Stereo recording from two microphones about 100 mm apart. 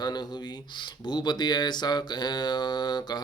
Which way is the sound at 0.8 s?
45° left (ahead or behind).